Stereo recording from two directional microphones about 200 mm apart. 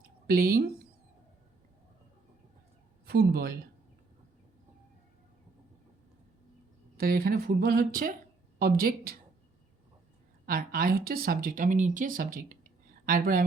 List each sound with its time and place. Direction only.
0.3 s speech: 45° right (ahead or behind)
3.1 s speech: 45° right (ahead or behind)
6.9 s speech: 45° right (ahead or behind)
10.4 s speech: 45° right (ahead or behind)